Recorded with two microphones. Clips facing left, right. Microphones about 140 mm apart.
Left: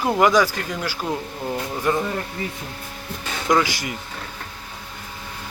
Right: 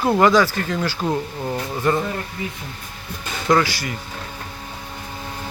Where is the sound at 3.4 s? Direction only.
15° left (ahead or behind).